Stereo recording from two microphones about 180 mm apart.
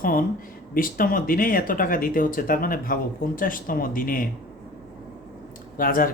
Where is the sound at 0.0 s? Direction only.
50° left (ahead or behind).